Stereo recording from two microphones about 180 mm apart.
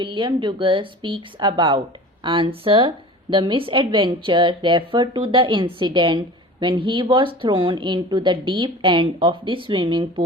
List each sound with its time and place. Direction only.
0.0 s speech: 25° right (ahead or behind)